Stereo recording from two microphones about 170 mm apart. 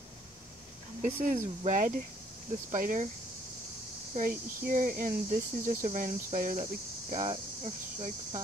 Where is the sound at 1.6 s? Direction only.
45° right (ahead or behind).